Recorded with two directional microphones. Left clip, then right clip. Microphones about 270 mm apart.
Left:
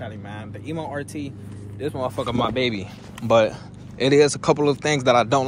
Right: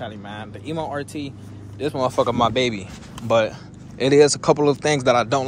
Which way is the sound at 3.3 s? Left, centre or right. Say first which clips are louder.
Left 1 dB; centre.